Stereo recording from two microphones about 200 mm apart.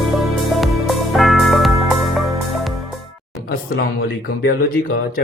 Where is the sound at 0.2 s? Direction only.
Centre (ahead or behind).